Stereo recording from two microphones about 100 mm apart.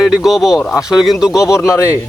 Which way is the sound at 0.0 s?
5° right (ahead or behind).